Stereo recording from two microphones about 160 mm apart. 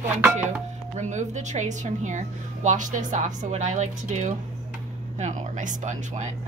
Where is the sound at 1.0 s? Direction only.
50° right (ahead or behind).